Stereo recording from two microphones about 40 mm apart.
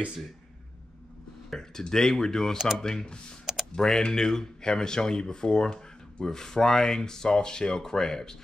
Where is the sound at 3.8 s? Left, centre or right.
Centre.